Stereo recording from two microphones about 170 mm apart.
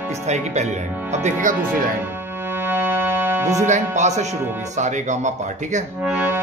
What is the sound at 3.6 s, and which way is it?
Speech, 45° right (ahead or behind).